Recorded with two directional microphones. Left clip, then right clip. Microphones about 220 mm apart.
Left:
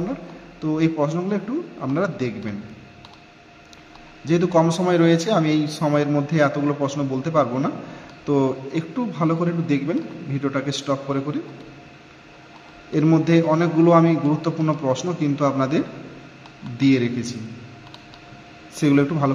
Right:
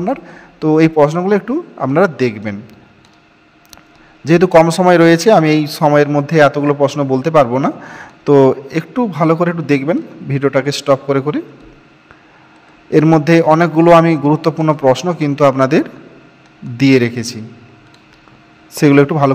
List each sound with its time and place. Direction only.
0.0 s a man's voice: 45° right (ahead or behind)
4.2 s a man's voice: 45° right (ahead or behind)
12.9 s a man's voice: 40° right (ahead or behind)
18.8 s a man's voice: 45° right (ahead or behind)